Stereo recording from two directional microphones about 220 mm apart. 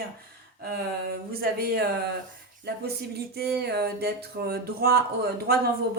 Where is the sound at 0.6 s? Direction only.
45° right (ahead or behind).